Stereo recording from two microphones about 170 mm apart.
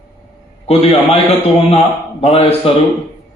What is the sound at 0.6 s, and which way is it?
A man's voice, 35° left (ahead or behind).